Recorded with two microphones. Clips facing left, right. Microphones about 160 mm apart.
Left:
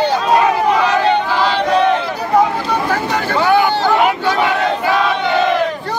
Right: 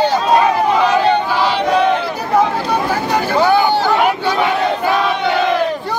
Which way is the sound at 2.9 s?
10° right (ahead or behind).